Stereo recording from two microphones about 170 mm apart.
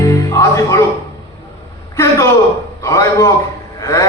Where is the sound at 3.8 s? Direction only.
20° left (ahead or behind).